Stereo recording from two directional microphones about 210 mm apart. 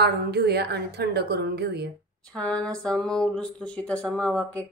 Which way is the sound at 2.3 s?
5° left (ahead or behind).